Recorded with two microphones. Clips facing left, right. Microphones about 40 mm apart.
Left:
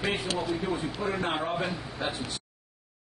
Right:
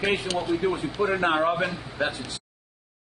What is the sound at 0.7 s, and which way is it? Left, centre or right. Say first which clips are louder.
Speech: right 5 dB; right.